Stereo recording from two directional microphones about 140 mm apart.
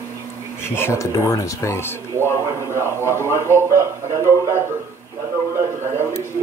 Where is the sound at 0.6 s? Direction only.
15° left (ahead or behind).